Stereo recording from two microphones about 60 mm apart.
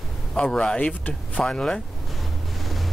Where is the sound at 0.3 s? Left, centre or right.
Centre.